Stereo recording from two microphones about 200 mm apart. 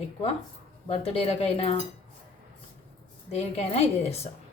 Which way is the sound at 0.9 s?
30° left (ahead or behind).